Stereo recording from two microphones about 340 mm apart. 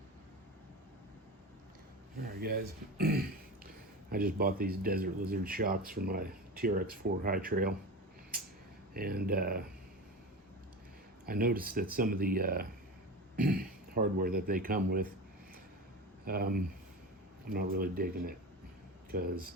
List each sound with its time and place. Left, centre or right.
2.1 s speech: right
8.9 s speech: right
11.3 s speech: right
16.2 s speech: right